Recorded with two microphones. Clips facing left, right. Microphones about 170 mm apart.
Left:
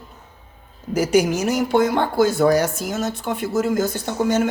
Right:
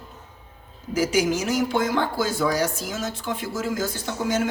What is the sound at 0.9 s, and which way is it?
Speech, 60° left (ahead or behind).